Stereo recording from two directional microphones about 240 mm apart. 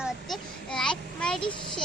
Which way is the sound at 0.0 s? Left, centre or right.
Centre.